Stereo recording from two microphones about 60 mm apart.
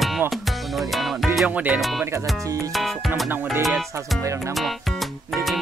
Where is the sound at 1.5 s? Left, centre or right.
Right.